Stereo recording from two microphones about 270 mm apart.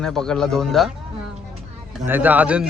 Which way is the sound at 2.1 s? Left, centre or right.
Centre.